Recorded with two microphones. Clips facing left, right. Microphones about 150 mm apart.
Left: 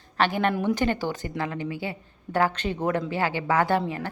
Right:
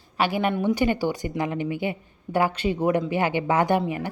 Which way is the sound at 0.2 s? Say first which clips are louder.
Even; 10° right (ahead or behind).